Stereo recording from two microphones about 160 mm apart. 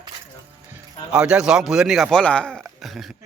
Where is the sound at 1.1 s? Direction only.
5° right (ahead or behind).